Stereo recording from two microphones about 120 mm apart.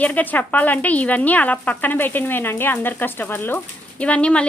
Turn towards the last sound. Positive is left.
turn(degrees=10)  # may be behind; listen again after turning